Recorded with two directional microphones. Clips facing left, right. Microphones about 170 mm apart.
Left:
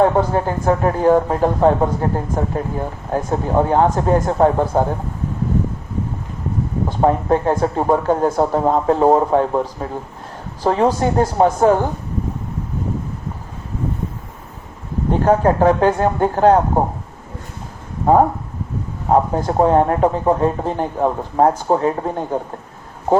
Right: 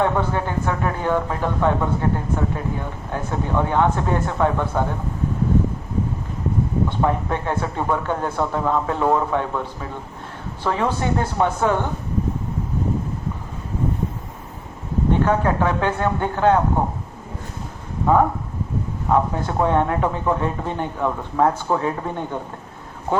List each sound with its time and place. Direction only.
0.0 s a man's voice: 35° left (ahead or behind)
6.8 s a man's voice: 35° left (ahead or behind)
15.2 s a man's voice: 40° left (ahead or behind)
18.0 s a man's voice: 35° left (ahead or behind)